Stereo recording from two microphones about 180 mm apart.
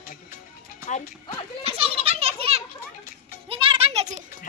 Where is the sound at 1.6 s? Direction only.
30° right (ahead or behind).